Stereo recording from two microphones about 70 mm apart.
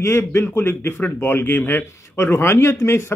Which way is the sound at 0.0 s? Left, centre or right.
Left.